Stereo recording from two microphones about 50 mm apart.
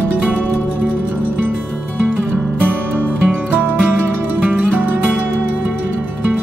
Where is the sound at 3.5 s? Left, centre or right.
Right.